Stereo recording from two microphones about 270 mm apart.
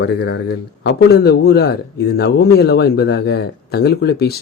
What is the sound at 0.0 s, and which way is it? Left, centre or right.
Speech, left.